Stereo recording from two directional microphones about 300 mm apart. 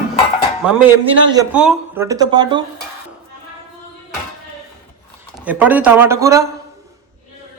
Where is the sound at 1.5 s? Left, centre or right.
Centre.